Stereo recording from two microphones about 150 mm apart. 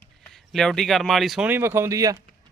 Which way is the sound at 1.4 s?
15° right (ahead or behind).